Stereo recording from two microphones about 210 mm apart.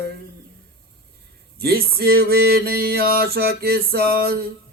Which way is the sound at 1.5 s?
45° right (ahead or behind).